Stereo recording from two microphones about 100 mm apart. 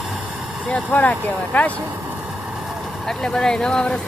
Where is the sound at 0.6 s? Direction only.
15° left (ahead or behind).